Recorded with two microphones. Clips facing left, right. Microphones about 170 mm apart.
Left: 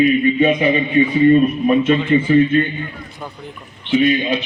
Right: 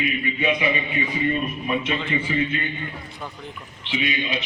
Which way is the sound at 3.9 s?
45° left (ahead or behind).